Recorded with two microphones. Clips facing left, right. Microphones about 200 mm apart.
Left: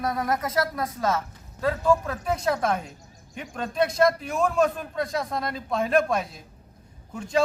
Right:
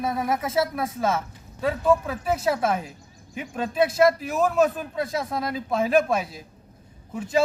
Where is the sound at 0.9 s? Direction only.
25° right (ahead or behind).